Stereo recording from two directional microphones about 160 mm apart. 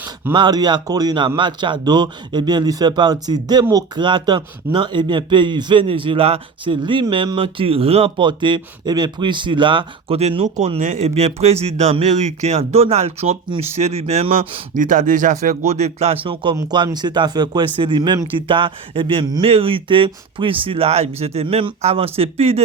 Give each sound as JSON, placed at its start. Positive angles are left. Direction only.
{"t": 0.3, "sound": "speech", "side_deg": -25}
{"t": 14.7, "sound": "speech", "side_deg": -55}